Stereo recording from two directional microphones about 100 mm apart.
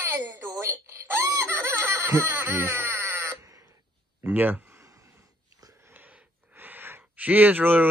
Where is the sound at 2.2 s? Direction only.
20° right (ahead or behind).